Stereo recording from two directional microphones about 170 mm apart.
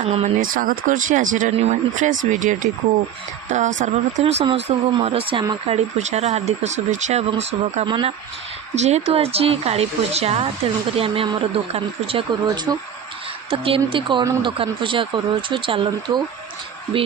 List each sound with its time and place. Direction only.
0.0 s speech: 35° right (ahead or behind)
0.4 s speech: 55° right (ahead or behind)
7.9 s speech: 25° right (ahead or behind)
8.7 s speech: 40° right (ahead or behind)